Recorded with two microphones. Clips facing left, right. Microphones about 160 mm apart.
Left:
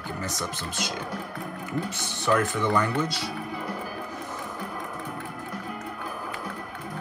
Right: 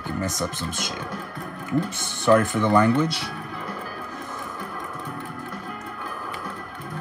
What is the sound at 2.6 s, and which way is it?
Speech, 60° right (ahead or behind).